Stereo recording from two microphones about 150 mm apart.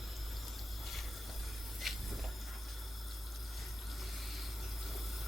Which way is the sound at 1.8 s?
Centre (ahead or behind).